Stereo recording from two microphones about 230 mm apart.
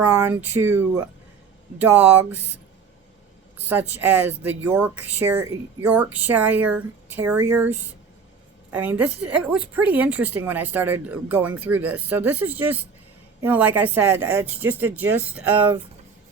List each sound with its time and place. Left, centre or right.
0.0 s speech: centre
3.6 s speech: centre